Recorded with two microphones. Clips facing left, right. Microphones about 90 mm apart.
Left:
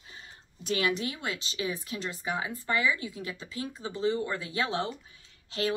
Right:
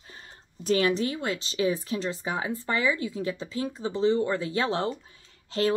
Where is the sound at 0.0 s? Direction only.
45° right (ahead or behind).